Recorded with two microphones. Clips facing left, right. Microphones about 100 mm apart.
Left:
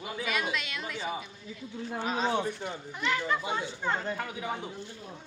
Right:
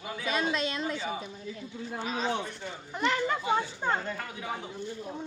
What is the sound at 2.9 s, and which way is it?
Speech, 40° right (ahead or behind).